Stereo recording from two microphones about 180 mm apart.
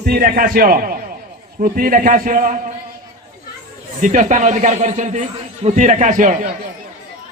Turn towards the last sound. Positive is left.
turn(degrees=-45)  # may be behind; listen again after turning